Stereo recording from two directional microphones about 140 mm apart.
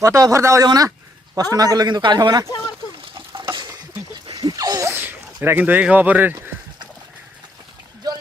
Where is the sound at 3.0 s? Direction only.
35° right (ahead or behind).